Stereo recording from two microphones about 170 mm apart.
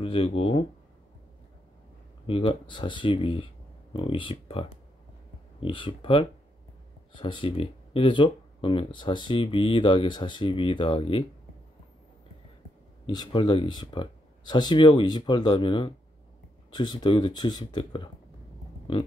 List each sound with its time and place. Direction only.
0.0 s speech: 30° left (ahead or behind)
2.2 s speech: 30° left (ahead or behind)
13.0 s speech: 25° left (ahead or behind)